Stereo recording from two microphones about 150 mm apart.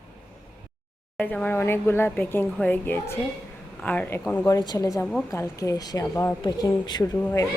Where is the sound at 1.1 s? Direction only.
10° left (ahead or behind).